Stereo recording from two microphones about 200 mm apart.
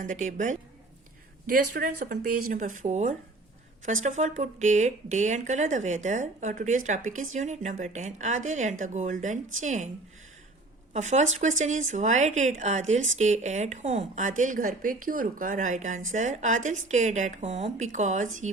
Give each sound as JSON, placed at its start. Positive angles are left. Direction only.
{"t": 0.0, "sound": "speech", "side_deg": -40}
{"t": 10.9, "sound": "speech", "side_deg": -35}